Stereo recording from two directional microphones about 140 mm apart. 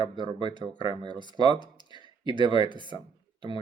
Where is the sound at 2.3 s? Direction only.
35° right (ahead or behind).